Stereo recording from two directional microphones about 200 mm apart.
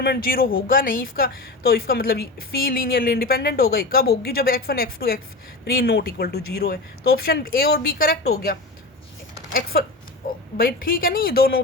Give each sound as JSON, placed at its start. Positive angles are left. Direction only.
{"t": 0.0, "sound": "speech", "side_deg": 50}
{"t": 10.6, "sound": "speech", "side_deg": 45}